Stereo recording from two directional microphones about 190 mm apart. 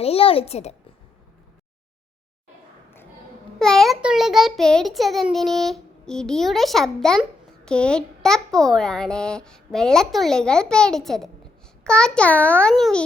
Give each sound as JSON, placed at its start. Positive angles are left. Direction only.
{"t": 0.0, "sound": "a child's voice", "side_deg": 30}
{"t": 3.6, "sound": "a child's voice", "side_deg": 0}